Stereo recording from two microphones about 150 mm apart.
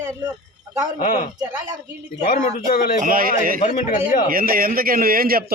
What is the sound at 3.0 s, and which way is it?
Speech, 65° right (ahead or behind).